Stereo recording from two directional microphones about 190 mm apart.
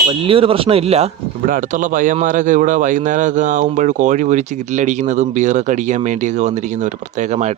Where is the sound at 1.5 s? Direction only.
45° right (ahead or behind).